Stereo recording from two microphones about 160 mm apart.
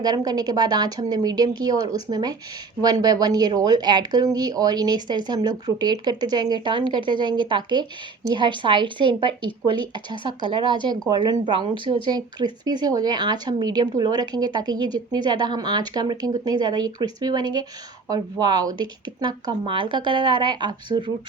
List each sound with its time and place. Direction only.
0.0 s speech: 25° right (ahead or behind)